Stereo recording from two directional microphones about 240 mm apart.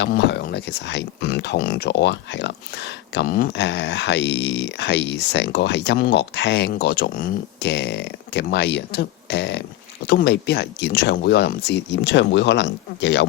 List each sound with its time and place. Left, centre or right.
0.0 s speech: left